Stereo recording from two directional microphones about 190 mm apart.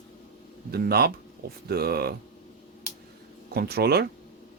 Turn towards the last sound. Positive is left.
turn(degrees=-55)  # may be behind; listen again after turning